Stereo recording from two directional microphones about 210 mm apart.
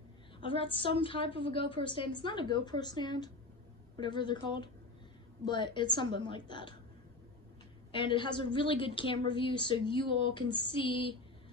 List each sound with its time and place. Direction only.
0.4 s a woman's voice: 25° left (ahead or behind)
7.9 s a woman's voice: 25° left (ahead or behind)